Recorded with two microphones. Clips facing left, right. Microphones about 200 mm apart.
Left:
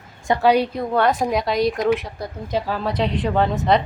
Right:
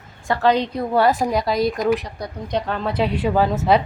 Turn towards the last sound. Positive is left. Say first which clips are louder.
# right 1 dB
turn(degrees=-5)  # may be behind; listen again after turning